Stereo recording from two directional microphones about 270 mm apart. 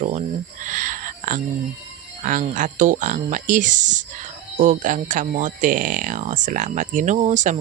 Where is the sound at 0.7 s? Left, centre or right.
Right.